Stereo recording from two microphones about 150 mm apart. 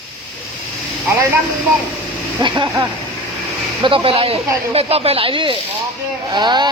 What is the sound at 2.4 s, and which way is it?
Speech, 30° right (ahead or behind).